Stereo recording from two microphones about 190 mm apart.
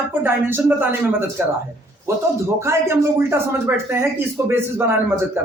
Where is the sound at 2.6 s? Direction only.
15° right (ahead or behind).